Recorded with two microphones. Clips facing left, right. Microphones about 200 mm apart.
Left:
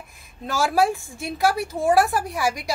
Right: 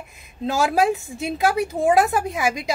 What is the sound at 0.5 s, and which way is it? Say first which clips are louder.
A woman's voice: right 2 dB; 20° right (ahead or behind).